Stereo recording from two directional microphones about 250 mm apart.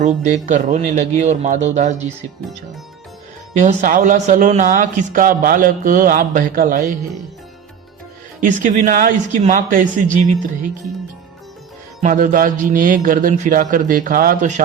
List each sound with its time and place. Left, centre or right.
0.0 s a man's voice: right
3.5 s a man's voice: right
8.4 s a man's voice: right
12.0 s a man's voice: right